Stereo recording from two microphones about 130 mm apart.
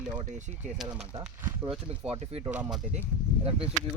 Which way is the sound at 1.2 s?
10° right (ahead or behind).